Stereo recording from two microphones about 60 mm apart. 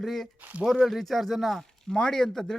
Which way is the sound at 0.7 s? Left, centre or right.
Centre.